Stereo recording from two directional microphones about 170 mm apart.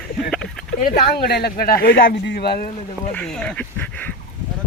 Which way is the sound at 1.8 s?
85° left.